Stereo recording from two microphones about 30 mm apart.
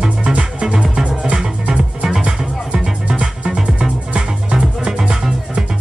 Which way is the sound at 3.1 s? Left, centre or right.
Right.